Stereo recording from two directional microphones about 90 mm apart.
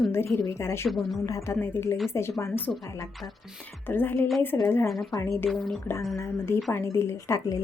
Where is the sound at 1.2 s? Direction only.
35° left (ahead or behind).